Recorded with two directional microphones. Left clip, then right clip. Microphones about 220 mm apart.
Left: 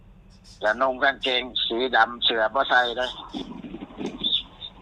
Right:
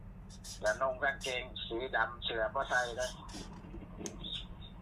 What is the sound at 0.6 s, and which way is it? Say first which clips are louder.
Speech: left 11 dB; 55° left (ahead or behind).